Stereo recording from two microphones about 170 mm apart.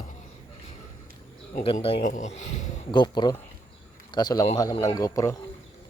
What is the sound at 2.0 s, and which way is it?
Speech, 45° left (ahead or behind).